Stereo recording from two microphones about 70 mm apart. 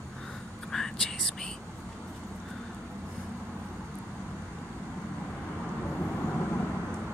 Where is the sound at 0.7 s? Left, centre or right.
Centre.